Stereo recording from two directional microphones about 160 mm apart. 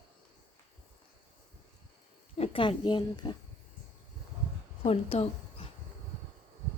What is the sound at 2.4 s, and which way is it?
Speech, 30° left (ahead or behind).